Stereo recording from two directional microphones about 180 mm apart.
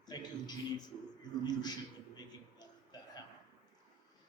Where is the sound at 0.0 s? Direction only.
25° left (ahead or behind).